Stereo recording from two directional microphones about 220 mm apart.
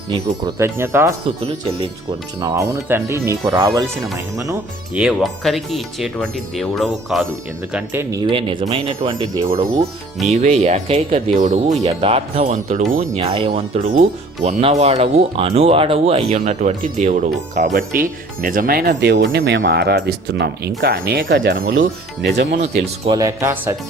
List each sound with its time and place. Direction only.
0.1 s speech: 15° right (ahead or behind)
2.4 s speech: 15° right (ahead or behind)
4.9 s speech: centre (ahead or behind)
8.1 s speech: 20° right (ahead or behind)
10.3 s speech: 30° right (ahead or behind)
13.1 s speech: 25° right (ahead or behind); by 22.6 s 50° right (ahead or behind)
22.6 s speech: 20° right (ahead or behind)